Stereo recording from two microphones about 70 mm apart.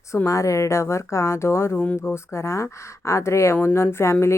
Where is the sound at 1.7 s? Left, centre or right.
Centre.